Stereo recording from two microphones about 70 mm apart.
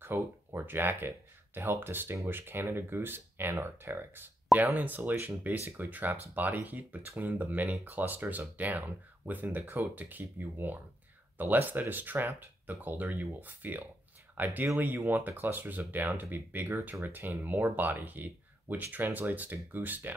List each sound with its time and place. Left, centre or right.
0.0 s speech: right